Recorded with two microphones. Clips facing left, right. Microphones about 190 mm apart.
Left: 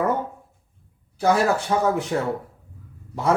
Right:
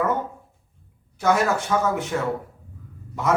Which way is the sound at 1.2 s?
35° left (ahead or behind).